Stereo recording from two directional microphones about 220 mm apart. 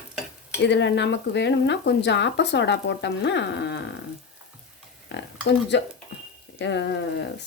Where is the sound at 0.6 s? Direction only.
50° left (ahead or behind).